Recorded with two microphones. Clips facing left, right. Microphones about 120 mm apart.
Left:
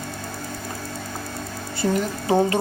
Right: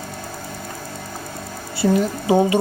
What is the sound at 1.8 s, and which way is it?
Speech, 20° right (ahead or behind).